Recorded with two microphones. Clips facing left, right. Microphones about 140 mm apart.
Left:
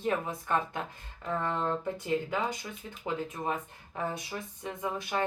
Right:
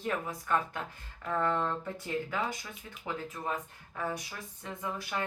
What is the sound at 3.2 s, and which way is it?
Speech, 20° left (ahead or behind).